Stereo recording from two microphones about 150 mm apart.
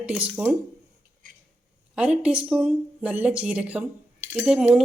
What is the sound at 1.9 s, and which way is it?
Speech, 5° right (ahead or behind).